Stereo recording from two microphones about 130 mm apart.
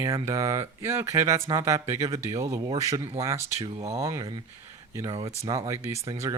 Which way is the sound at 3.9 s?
25° right (ahead or behind).